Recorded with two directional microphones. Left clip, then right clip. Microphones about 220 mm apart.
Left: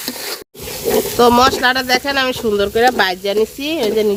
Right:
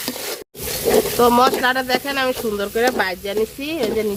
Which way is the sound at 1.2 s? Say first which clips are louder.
Left 5 dB; 45° left (ahead or behind).